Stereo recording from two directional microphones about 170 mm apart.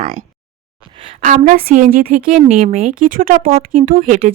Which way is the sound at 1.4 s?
55° right (ahead or behind).